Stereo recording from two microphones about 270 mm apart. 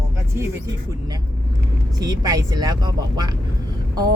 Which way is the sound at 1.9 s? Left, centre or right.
Centre.